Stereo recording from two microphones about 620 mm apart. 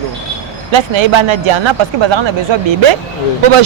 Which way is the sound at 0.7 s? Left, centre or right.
Right.